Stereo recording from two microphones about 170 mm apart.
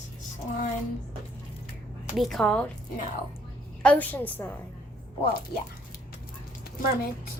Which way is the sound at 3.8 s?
10° left (ahead or behind).